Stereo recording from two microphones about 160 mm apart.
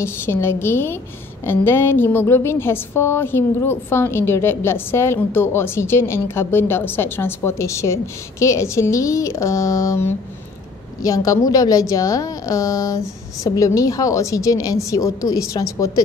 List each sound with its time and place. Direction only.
0.0 s a woman's voice: 15° left (ahead or behind)